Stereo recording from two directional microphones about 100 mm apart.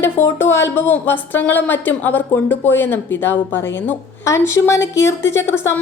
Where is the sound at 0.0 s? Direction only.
25° left (ahead or behind).